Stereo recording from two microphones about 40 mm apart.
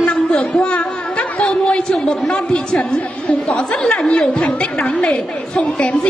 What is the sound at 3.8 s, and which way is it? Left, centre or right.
Speech, centre.